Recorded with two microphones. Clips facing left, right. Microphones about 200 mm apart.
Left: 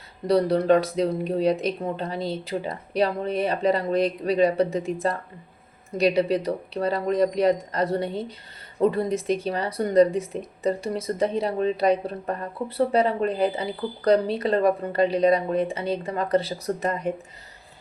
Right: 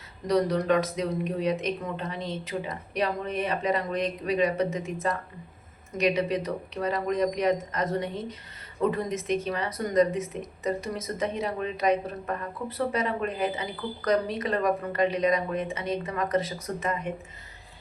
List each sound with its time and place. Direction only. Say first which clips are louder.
0.3 s speech: left 5 dB; 30° left (ahead or behind)